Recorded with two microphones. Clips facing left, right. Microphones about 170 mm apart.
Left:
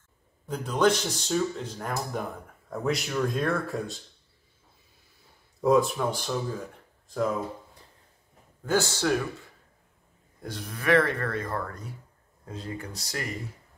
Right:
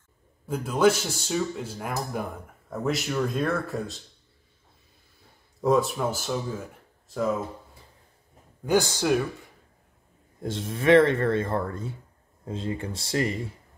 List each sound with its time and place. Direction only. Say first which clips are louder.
0.5 s speech: right 2 dB; 5° right (ahead or behind)
5.6 s speech: even; centre (ahead or behind)
8.6 s speech: right 3 dB; 15° right (ahead or behind)
10.4 s speech: right 6 dB; 25° right (ahead or behind)